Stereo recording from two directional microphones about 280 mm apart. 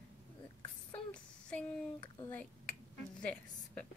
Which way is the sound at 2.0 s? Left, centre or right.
Centre.